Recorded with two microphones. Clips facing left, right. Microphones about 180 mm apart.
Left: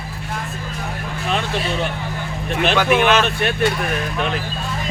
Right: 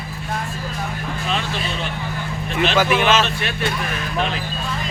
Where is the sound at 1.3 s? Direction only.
55° left (ahead or behind).